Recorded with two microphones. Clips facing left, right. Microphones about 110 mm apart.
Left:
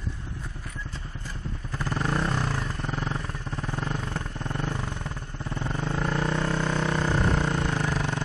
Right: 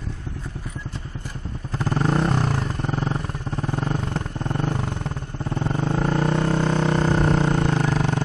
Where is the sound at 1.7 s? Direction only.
30° right (ahead or behind).